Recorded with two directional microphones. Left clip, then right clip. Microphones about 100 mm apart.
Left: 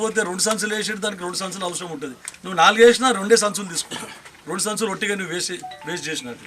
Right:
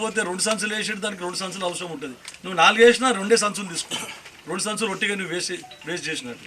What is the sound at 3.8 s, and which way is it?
Speech, 20° right (ahead or behind).